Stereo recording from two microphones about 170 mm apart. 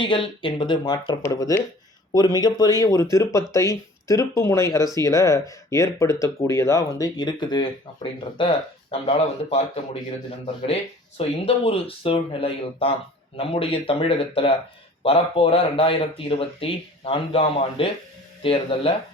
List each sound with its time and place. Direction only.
0.0 s speech: 30° left (ahead or behind)
11.2 s speech: 35° left (ahead or behind)